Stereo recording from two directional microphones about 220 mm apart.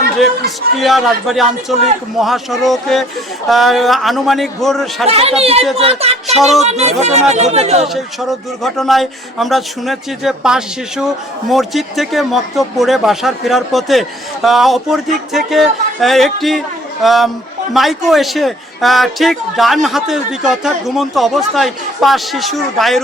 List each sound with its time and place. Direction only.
0.2 s speech: centre (ahead or behind)
5.0 s speech: 25° right (ahead or behind)
6.3 s speech: centre (ahead or behind)
6.6 s speech: 30° right (ahead or behind)
8.6 s speech: centre (ahead or behind)